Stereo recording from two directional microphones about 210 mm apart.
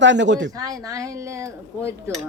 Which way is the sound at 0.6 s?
15° right (ahead or behind).